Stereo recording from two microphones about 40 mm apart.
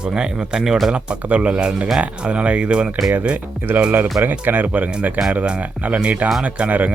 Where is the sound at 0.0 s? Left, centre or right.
Right.